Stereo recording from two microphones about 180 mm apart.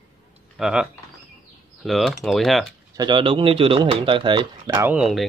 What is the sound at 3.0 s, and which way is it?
Speech, 25° right (ahead or behind).